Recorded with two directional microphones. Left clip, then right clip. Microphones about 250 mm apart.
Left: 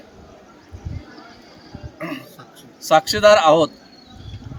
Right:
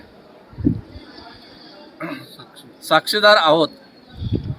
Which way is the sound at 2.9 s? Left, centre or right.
Centre.